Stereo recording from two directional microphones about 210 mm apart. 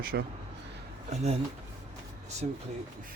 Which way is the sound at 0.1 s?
50° right (ahead or behind).